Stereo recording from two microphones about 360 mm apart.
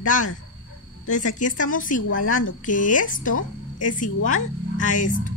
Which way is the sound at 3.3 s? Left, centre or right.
Left.